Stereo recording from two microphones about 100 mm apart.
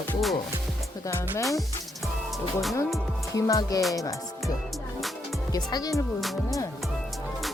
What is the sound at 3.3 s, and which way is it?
Speech, 35° left (ahead or behind).